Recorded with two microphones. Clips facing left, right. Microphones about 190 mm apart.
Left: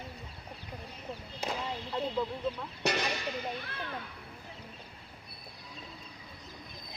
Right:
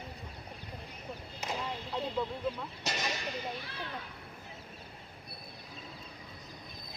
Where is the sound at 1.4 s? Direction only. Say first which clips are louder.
Left 2 dB; 30° left (ahead or behind).